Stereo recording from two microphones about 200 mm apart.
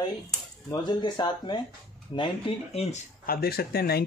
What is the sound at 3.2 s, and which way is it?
Speech, 50° left (ahead or behind).